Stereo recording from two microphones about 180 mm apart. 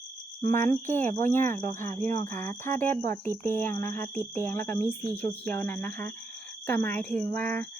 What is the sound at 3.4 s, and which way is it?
Speech, 10° left (ahead or behind).